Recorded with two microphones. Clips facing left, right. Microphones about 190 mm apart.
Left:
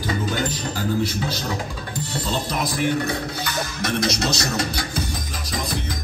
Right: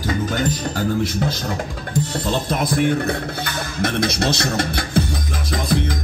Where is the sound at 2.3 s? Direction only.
55° right (ahead or behind).